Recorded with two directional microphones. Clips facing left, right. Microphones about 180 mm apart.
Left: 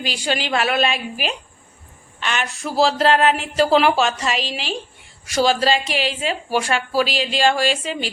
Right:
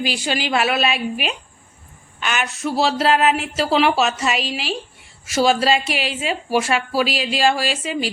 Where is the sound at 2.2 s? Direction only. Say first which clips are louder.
Right 2 dB; 5° right (ahead or behind).